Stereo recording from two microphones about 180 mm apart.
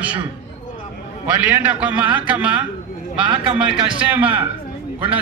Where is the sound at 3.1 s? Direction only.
25° right (ahead or behind).